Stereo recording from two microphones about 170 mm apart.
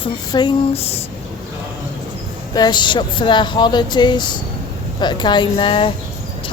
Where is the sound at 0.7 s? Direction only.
35° left (ahead or behind).